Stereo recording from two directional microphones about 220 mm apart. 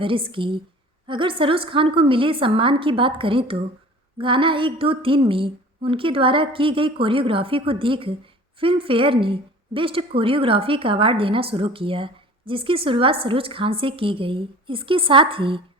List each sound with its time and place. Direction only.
0.0 s a woman's voice: 25° right (ahead or behind)